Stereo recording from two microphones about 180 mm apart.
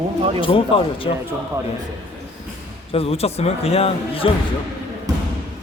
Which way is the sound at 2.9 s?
35° left (ahead or behind).